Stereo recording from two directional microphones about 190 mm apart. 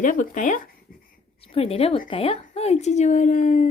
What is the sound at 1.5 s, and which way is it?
A child's voice, 30° left (ahead or behind).